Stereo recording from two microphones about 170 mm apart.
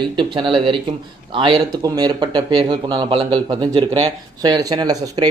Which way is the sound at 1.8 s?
25° right (ahead or behind).